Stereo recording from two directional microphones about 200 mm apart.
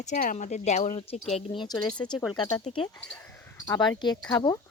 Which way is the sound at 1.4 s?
25° left (ahead or behind).